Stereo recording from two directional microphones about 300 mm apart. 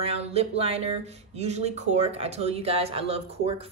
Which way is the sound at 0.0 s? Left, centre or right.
Centre.